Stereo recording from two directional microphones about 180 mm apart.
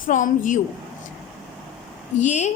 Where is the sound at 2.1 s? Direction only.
40° left (ahead or behind).